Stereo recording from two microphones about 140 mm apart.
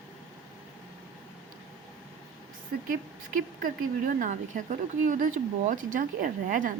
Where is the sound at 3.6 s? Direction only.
75° right (ahead or behind).